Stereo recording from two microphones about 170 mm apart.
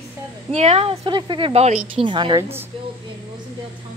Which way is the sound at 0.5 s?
35° right (ahead or behind).